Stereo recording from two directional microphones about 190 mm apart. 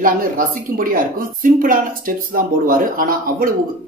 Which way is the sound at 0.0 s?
45° right (ahead or behind).